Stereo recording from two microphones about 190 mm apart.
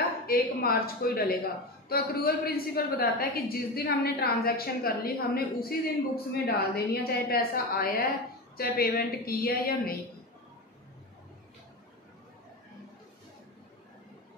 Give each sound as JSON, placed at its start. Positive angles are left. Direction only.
{"t": 0.3, "sound": "a woman's voice", "side_deg": 50}